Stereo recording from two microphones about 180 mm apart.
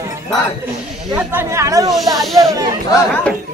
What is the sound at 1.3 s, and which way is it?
Speech, 15° right (ahead or behind).